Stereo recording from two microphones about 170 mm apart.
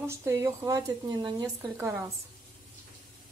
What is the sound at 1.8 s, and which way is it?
Speech, 15° right (ahead or behind).